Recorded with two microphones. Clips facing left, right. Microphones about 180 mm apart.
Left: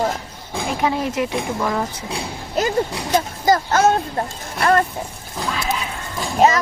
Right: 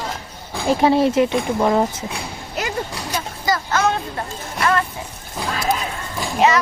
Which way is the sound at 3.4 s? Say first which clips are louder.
Left 3 dB; 40° left (ahead or behind).